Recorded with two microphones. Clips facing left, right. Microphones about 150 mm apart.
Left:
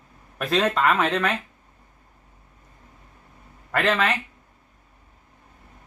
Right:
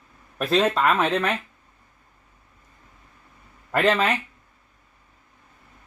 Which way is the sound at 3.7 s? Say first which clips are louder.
Right 2 dB; 10° right (ahead or behind).